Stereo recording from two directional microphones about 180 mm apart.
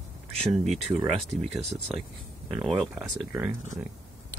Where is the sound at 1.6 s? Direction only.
40° right (ahead or behind).